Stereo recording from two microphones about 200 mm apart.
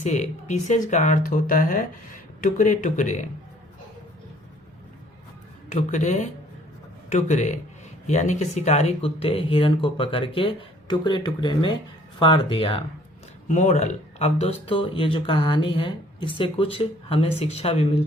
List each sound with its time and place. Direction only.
0.0 s speech: 35° left (ahead or behind)
5.6 s speech: 35° left (ahead or behind)